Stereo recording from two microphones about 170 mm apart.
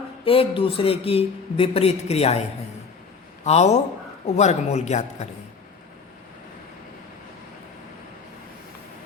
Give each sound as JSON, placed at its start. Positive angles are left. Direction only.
{"t": 0.3, "sound": "a man's voice", "side_deg": 30}
{"t": 3.4, "sound": "a man's voice", "side_deg": 40}